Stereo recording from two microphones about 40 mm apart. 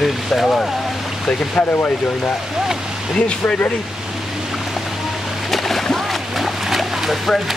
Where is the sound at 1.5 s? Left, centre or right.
Left.